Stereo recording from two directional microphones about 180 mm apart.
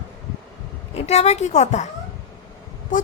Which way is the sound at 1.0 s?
35° left (ahead or behind).